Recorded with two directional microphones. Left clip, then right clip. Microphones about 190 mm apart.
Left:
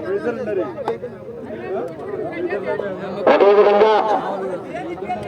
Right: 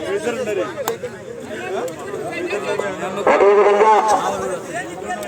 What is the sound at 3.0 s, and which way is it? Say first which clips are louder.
Speech: left 1 dB; 45° right (ahead or behind).